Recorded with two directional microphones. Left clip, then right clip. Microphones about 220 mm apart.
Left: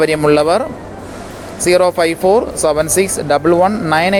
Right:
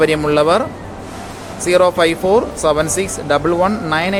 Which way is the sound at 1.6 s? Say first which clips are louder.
Left 1 dB; 25° left (ahead or behind).